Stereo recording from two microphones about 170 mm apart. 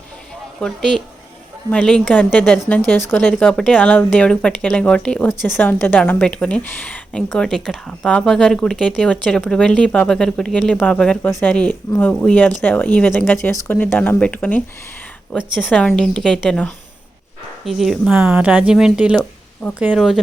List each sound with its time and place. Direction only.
0.6 s speech: 5° left (ahead or behind)
2.4 s speech: centre (ahead or behind)
2.6 s speech: 10° left (ahead or behind)
17.7 s speech: centre (ahead or behind)